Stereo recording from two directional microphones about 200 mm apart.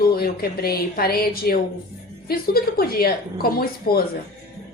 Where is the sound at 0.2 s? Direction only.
50° left (ahead or behind).